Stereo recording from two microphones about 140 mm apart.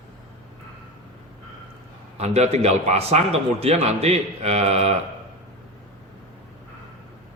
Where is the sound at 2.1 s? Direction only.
50° right (ahead or behind).